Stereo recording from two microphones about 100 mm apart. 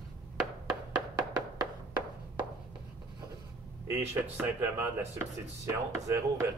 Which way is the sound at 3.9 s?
20° right (ahead or behind).